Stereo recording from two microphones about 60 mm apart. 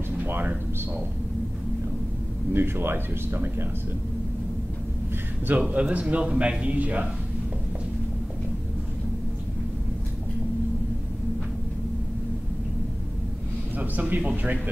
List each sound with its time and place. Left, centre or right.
0.2 s a sound: right
2.5 s speech: right
5.7 s speech: right
13.7 s speech: right